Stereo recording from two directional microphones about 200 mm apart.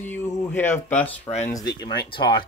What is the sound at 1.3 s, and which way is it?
Speech, 35° left (ahead or behind).